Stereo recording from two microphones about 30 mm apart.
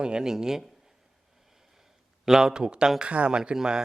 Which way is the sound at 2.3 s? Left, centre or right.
Centre.